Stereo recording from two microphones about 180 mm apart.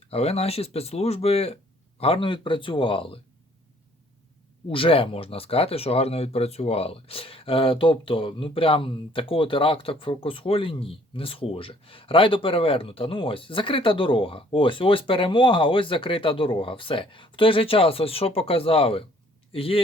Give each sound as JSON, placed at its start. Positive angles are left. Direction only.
{"t": 0.1, "sound": "speech", "side_deg": 35}
{"t": 4.7, "sound": "speech", "side_deg": 30}